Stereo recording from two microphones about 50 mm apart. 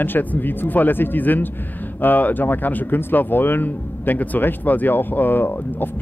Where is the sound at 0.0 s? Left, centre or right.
Left.